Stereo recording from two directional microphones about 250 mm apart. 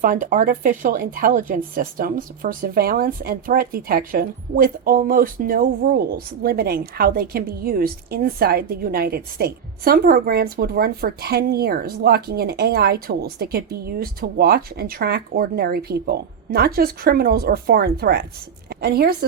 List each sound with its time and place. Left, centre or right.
0.0 s a woman's voice: right